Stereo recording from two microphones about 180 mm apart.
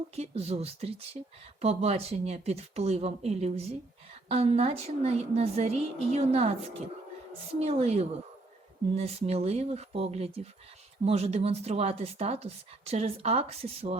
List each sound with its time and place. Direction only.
0.2 s speech: 35° right (ahead or behind)